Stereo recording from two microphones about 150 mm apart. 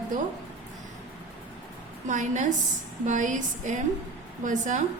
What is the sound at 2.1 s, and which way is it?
A woman's voice, 55° right (ahead or behind).